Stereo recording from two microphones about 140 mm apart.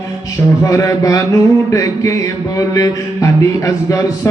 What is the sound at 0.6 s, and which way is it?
Mantra, 25° left (ahead or behind).